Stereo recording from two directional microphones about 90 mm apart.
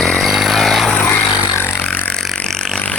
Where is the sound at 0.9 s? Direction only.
20° left (ahead or behind).